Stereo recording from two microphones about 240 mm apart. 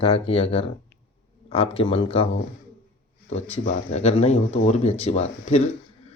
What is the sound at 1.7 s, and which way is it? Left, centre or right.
Speech, left.